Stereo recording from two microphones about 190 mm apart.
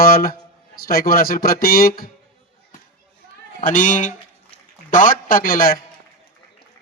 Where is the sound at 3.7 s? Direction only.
40° left (ahead or behind).